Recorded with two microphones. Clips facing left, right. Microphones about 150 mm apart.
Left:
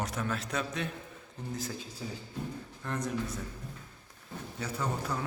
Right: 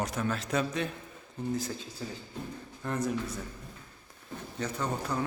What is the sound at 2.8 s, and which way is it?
Speech, 5° right (ahead or behind).